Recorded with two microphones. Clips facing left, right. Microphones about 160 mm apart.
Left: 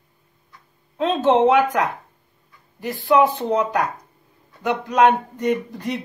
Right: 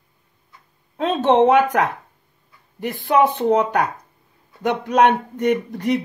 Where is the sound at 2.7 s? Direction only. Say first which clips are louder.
Even; 60° right (ahead or behind).